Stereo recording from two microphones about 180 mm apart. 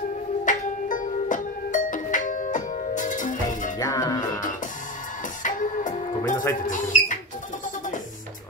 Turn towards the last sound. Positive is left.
turn(degrees=45)  # may be behind; listen again after turning